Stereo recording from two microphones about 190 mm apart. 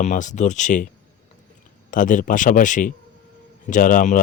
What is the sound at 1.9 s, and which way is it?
A man's voice, 45° left (ahead or behind).